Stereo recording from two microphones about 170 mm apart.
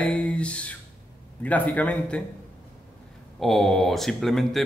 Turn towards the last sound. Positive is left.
turn(degrees=0)  # may be behind; listen again after turning